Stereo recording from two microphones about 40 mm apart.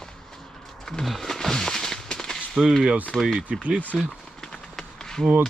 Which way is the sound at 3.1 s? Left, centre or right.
Centre.